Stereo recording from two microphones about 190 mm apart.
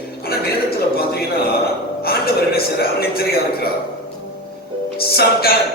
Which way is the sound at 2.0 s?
55° left (ahead or behind).